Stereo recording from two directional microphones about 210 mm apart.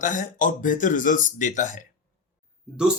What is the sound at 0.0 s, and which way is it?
Speech, 40° left (ahead or behind).